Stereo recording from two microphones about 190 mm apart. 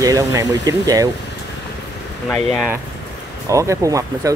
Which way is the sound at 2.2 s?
5° left (ahead or behind).